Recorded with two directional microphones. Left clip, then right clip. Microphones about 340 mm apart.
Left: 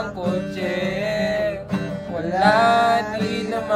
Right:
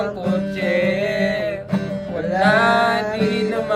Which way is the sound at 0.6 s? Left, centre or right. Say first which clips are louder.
Right 6 dB; centre.